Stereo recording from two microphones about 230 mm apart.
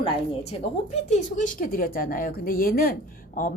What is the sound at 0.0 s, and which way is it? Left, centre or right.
A woman's voice, left.